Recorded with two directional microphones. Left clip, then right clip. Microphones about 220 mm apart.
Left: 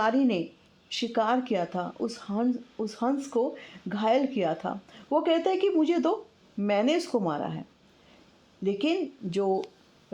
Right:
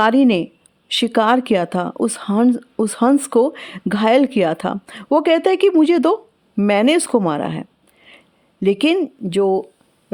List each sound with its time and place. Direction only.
0.0 s speech: 40° right (ahead or behind)
8.6 s speech: 40° right (ahead or behind)